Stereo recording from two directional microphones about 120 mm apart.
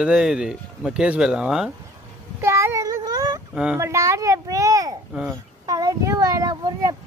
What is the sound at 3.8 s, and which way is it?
A child's voice, 25° right (ahead or behind).